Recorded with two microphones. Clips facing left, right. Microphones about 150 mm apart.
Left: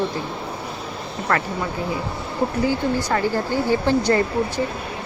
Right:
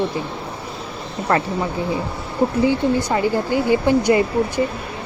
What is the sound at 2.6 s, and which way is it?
Speech, 20° right (ahead or behind).